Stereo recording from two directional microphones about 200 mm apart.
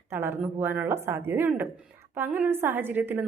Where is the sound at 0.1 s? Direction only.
10° right (ahead or behind).